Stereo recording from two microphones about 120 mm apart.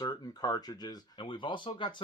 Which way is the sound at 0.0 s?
35° left (ahead or behind).